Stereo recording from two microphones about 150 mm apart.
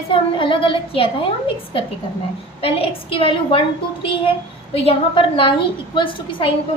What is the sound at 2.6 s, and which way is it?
A woman's voice, 40° left (ahead or behind).